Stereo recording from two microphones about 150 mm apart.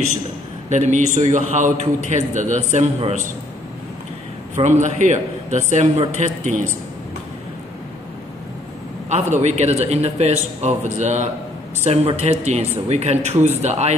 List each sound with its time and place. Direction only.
0.7 s a man's voice: 50° right (ahead or behind)
4.6 s a man's voice: 50° right (ahead or behind)
9.1 s a man's voice: 50° right (ahead or behind)